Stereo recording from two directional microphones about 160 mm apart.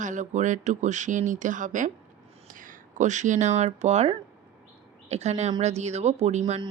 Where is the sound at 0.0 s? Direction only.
50° right (ahead or behind).